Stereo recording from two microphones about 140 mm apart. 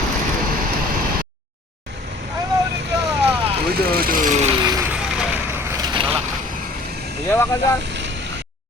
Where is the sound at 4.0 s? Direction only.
85° right.